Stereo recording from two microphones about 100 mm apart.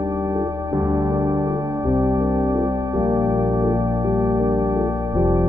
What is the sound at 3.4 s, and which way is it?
Music, 45° right (ahead or behind).